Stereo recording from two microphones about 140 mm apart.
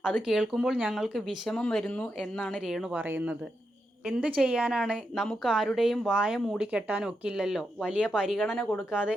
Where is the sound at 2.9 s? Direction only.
10° right (ahead or behind).